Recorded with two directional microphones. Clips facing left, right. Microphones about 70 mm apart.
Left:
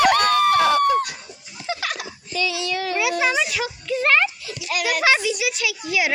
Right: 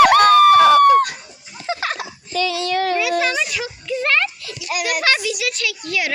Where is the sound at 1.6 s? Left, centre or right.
Right.